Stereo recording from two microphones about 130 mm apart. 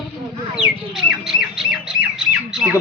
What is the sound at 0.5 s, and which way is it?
Squawk, 5° right (ahead or behind).